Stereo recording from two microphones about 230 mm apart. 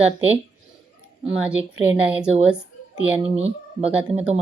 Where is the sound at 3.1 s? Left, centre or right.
Right.